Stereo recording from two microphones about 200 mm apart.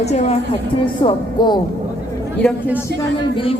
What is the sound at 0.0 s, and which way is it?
Speech, 35° left (ahead or behind).